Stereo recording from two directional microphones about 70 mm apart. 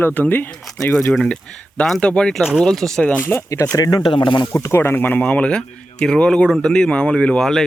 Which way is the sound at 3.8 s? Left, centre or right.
Left.